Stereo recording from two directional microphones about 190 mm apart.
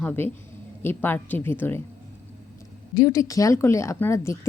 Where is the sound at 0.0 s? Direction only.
10° left (ahead or behind).